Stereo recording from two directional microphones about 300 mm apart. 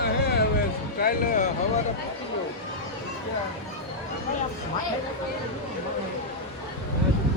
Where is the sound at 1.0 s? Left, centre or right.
Left.